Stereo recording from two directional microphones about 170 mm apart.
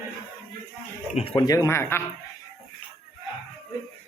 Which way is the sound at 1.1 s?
30° left (ahead or behind).